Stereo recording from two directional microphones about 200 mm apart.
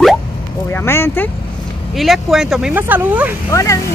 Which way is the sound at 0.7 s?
10° left (ahead or behind).